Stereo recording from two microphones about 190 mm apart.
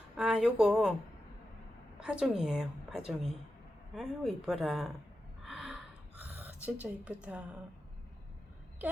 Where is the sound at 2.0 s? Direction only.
5° right (ahead or behind).